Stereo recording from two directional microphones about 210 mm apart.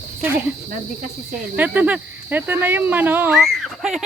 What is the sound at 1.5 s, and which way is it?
Speech, 5° right (ahead or behind).